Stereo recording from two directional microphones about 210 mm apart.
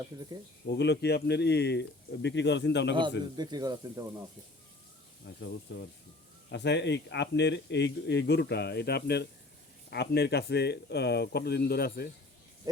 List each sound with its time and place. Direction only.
0.7 s speech: 55° left (ahead or behind)
2.9 s speech: 20° right (ahead or behind)
5.2 s speech: 55° left (ahead or behind)